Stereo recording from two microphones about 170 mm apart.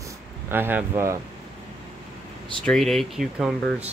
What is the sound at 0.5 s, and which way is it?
Speech, 10° right (ahead or behind).